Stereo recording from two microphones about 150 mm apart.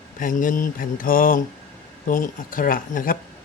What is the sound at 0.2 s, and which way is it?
Speech, 60° left (ahead or behind).